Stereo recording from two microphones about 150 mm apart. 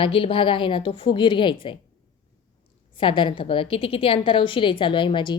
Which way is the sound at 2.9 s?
35° left (ahead or behind).